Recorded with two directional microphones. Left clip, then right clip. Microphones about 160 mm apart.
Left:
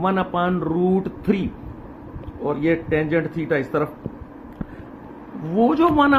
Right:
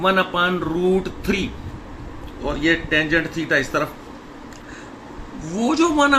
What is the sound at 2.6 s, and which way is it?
Speech, 45° left (ahead or behind).